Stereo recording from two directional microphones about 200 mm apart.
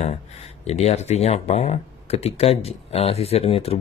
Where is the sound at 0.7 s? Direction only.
30° left (ahead or behind).